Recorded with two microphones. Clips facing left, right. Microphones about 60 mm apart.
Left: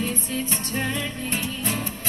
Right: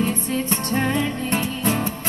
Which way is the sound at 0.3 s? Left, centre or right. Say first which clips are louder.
Right 5 dB; right.